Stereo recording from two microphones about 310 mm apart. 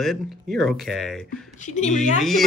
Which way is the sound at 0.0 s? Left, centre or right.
Centre.